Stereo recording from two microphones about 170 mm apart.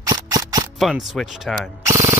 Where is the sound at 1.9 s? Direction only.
15° right (ahead or behind).